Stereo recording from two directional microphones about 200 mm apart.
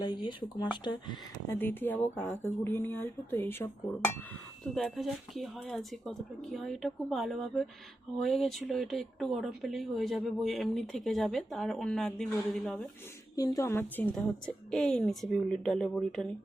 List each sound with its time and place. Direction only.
0.0 s speech: 20° left (ahead or behind)
1.5 s speech: 10° left (ahead or behind)
4.7 s speech: centre (ahead or behind)
13.3 s speech: 15° left (ahead or behind)